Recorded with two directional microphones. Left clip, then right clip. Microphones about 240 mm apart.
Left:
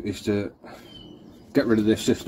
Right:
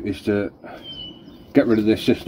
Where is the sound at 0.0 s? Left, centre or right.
Left.